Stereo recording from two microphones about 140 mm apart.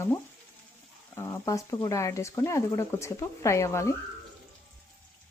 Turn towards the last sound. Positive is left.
turn(degrees=20)  # may be behind; listen again after turning